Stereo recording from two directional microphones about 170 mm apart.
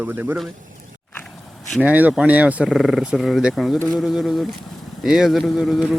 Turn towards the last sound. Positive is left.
turn(degrees=0)  # may be behind; listen again after turning